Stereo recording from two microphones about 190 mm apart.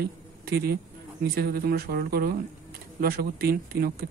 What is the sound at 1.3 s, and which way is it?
Speech, 55° right (ahead or behind).